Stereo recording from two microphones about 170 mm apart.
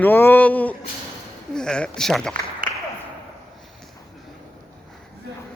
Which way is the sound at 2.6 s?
55° right (ahead or behind).